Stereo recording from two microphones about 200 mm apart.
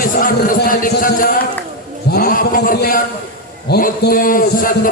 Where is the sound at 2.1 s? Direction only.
45° left (ahead or behind).